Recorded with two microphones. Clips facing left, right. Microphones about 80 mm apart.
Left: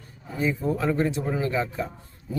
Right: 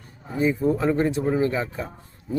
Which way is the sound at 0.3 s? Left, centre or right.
Centre.